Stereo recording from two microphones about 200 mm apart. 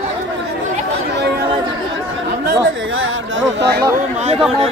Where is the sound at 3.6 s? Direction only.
55° right (ahead or behind).